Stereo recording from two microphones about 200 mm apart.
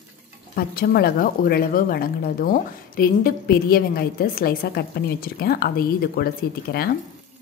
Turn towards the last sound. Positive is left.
turn(degrees=50)  # may be behind; listen again after turning